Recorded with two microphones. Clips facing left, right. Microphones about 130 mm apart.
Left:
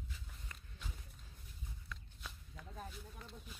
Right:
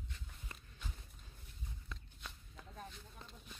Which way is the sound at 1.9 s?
25° right (ahead or behind).